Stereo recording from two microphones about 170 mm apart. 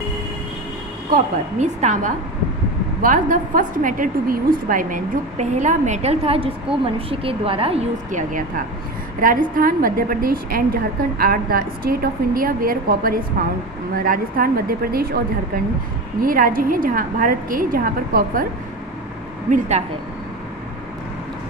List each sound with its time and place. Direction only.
1.1 s a woman's voice: 45° right (ahead or behind)